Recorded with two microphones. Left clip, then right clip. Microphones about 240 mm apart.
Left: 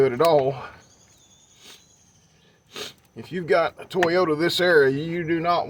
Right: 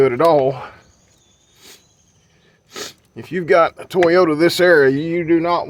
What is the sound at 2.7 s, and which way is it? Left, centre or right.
Speech, right.